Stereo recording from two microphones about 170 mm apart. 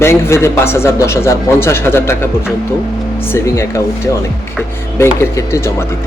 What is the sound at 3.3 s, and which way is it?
Speech, 15° left (ahead or behind).